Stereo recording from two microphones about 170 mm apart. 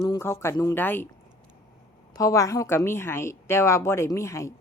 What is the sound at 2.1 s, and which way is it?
A woman's voice, 20° left (ahead or behind).